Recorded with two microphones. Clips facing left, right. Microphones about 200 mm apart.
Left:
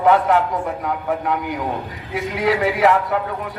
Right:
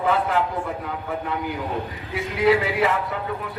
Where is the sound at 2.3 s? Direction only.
75° left (ahead or behind).